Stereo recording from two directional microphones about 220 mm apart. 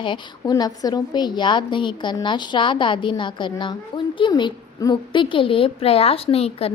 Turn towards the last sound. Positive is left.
turn(degrees=25)  # may be behind; listen again after turning